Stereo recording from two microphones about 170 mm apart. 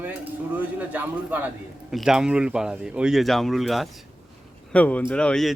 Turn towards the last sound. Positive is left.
turn(degrees=5)  # may be behind; listen again after turning